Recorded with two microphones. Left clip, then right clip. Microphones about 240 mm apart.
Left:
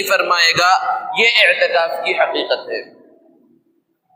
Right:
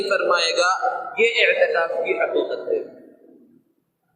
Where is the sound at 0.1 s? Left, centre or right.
Left.